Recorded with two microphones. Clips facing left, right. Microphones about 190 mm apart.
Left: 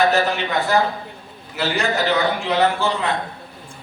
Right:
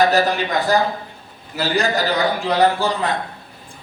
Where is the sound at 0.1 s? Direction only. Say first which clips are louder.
Right 2 dB; 35° right (ahead or behind).